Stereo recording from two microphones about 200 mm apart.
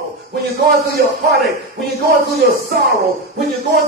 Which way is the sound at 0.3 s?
55° right (ahead or behind).